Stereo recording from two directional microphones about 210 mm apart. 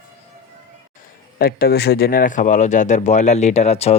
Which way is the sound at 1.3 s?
45° left (ahead or behind).